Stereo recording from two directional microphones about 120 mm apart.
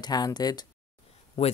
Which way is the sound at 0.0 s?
35° left (ahead or behind).